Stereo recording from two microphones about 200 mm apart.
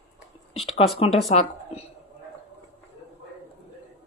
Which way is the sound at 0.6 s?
30° left (ahead or behind).